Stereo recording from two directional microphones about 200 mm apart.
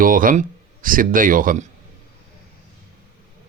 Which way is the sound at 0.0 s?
45° right (ahead or behind).